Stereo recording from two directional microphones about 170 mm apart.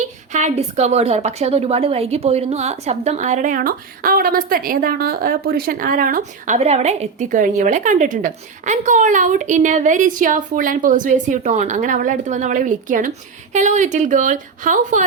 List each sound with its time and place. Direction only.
0.3 s a woman's voice: 45° right (ahead or behind)
6.6 s a woman's voice: 40° right (ahead or behind)